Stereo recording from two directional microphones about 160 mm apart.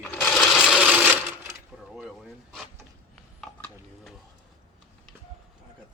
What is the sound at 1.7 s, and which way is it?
Mechanisms, 5° right (ahead or behind).